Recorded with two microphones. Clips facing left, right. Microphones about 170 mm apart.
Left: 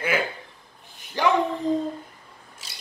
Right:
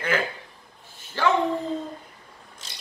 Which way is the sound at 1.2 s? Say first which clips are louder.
Left 1 dB; 15° left (ahead or behind).